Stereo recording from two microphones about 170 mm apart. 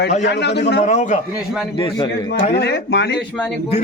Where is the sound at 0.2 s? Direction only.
85° left.